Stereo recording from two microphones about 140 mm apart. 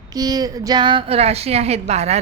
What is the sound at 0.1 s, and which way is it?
A woman's voice, 25° right (ahead or behind).